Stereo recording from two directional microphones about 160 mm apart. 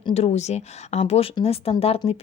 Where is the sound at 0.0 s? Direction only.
40° left (ahead or behind).